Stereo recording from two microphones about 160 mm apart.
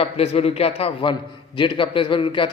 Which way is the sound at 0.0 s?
40° left (ahead or behind).